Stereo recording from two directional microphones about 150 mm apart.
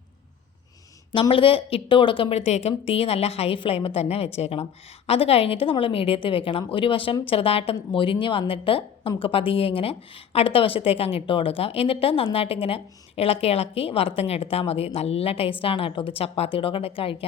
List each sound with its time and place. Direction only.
1.1 s a woman's voice: 35° left (ahead or behind)